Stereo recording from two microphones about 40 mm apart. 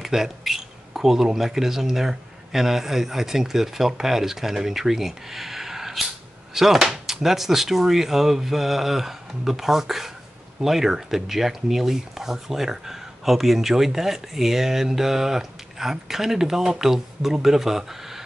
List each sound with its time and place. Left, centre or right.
0.0 s speech: centre